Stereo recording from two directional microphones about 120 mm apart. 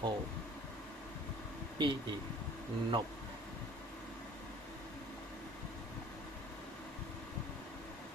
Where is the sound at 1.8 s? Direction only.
45° right (ahead or behind).